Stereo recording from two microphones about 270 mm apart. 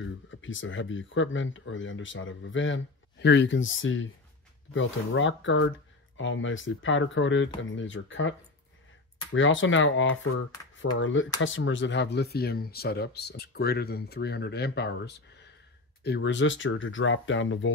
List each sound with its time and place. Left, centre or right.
0.0 s speech: left